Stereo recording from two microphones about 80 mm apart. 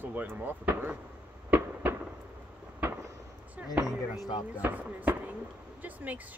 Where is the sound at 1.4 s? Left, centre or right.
Right.